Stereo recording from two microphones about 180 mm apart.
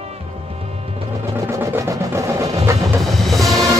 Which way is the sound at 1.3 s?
15° right (ahead or behind).